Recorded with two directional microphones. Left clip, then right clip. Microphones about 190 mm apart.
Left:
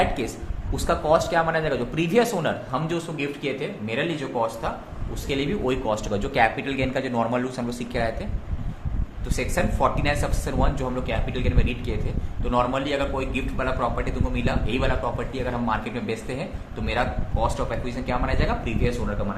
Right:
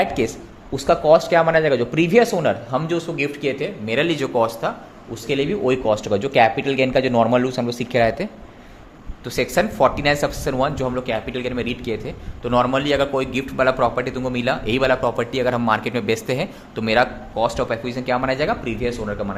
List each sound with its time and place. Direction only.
0.0 s a man's voice: 45° right (ahead or behind)
5.3 s a man's voice: 35° right (ahead or behind)